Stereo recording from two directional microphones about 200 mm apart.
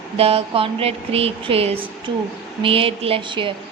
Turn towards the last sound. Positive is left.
turn(degrees=-25)  # may be behind; listen again after turning